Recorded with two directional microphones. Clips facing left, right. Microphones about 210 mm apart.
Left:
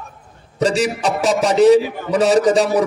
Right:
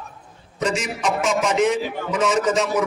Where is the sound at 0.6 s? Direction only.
35° left (ahead or behind).